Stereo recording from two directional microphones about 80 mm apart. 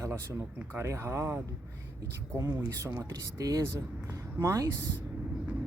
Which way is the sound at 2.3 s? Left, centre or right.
Right.